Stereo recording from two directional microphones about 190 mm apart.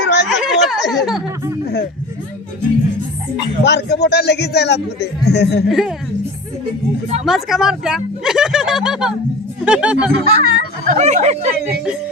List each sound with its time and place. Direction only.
0.0 s chatter: 65° left (ahead or behind)
0.3 s a sound: centre (ahead or behind)
1.6 s a sound: 55° left (ahead or behind)
3.6 s a man's voice: 65° left (ahead or behind)
5.6 s speech: centre (ahead or behind)
7.3 s speech: centre (ahead or behind)
10.1 s a child's voice: 55° right (ahead or behind)
10.9 s speech: 35° right (ahead or behind)